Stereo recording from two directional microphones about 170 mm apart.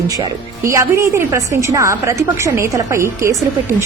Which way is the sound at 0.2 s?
15° right (ahead or behind).